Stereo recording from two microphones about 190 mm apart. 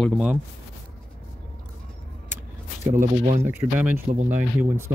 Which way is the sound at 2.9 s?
45° right (ahead or behind).